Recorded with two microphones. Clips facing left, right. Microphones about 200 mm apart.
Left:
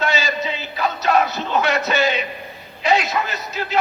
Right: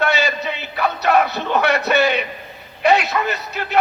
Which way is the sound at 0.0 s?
60° right (ahead or behind).